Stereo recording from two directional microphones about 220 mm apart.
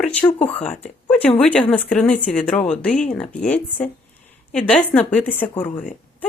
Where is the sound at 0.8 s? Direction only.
5° left (ahead or behind).